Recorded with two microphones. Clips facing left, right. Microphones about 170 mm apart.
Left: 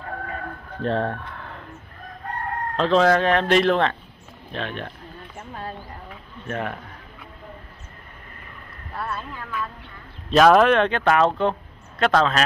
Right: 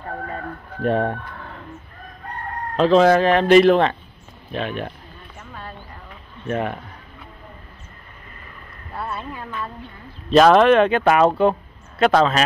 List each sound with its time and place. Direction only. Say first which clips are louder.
0.8 s speech: right 4 dB; 15° right (ahead or behind)
2.7 s speech: right 4 dB; 5° right (ahead or behind)
5.5 s mouse: left 3 dB; 35° left (ahead or behind)
6.4 s speech: right 5 dB; 5° right (ahead or behind)
8.9 s a sound: right 1 dB; 10° right (ahead or behind)
10.3 s speech: right 3 dB; centre (ahead or behind)